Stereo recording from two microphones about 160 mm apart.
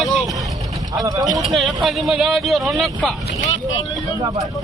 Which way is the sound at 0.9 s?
25° right (ahead or behind).